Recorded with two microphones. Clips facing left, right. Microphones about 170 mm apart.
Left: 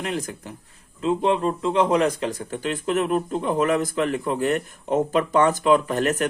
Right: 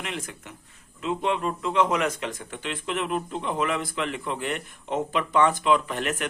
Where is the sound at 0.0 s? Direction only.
40° left (ahead or behind).